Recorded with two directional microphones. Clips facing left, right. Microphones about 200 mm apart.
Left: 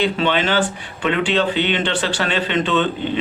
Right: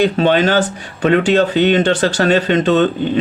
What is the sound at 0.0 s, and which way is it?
Speech, 45° right (ahead or behind).